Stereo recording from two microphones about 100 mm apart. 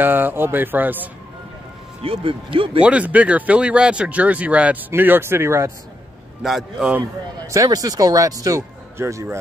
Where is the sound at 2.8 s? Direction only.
15° right (ahead or behind).